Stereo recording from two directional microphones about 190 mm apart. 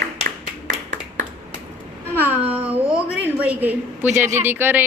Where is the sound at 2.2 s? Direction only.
10° right (ahead or behind).